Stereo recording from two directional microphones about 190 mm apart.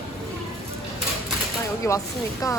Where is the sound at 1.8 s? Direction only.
15° left (ahead or behind).